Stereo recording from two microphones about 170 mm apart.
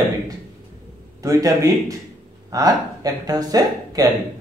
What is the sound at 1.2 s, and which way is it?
Speech, 20° right (ahead or behind).